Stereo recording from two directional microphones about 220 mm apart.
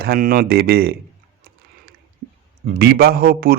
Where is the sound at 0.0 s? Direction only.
40° right (ahead or behind).